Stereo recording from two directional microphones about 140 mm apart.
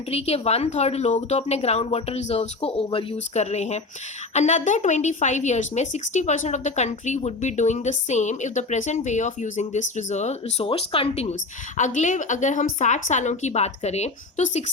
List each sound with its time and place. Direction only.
0.1 s speech: 50° left (ahead or behind)
10.7 s speech: 45° left (ahead or behind)
11.8 s speech: 60° left (ahead or behind)